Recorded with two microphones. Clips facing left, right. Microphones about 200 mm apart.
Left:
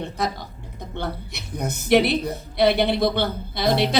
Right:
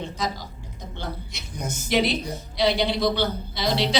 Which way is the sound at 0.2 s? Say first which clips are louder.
Left 4 dB; 60° left (ahead or behind).